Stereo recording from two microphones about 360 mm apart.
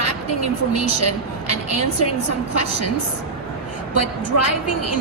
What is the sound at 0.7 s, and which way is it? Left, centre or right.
Speech, left.